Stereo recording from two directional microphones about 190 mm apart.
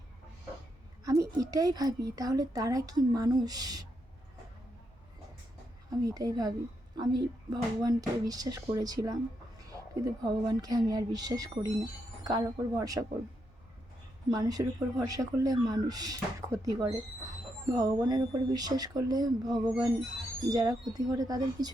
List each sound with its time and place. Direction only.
1.0 s a woman's voice: 15° right (ahead or behind)
5.9 s a woman's voice: 20° right (ahead or behind)
14.3 s a woman's voice: 20° right (ahead or behind)